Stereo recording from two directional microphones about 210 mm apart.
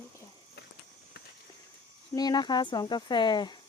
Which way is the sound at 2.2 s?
20° left (ahead or behind).